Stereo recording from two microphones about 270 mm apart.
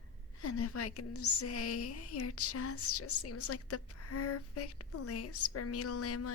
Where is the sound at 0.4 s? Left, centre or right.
Left.